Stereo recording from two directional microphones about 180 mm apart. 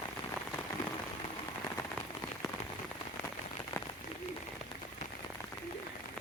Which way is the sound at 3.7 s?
15° left (ahead or behind).